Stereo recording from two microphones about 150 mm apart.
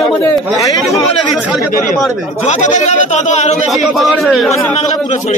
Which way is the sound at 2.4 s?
55° left (ahead or behind).